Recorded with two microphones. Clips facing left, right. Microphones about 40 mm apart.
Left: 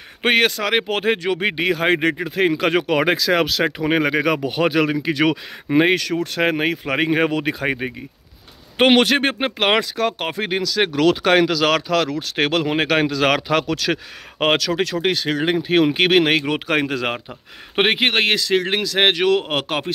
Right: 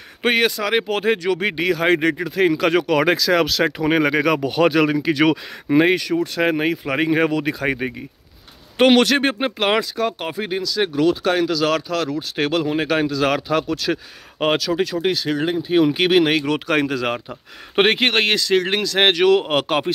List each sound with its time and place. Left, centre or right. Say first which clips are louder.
0.2 s speech: left 1 dB; left; by 5.4 s centre
5.9 s speech: right 1 dB; left
6.2 s speech: even; left
7.8 s a man's voice: right 1 dB; centre
8.7 s speech: even; left
9.6 s speech: left 2 dB; left
15.9 s speech: even; left
17.7 s a man's voice: right 1 dB; centre